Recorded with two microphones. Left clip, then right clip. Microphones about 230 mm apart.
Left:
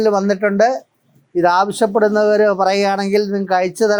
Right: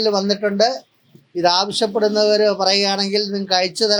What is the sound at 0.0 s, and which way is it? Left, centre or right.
Speech, left.